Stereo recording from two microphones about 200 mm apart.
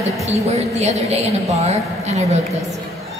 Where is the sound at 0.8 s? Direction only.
35° right (ahead or behind).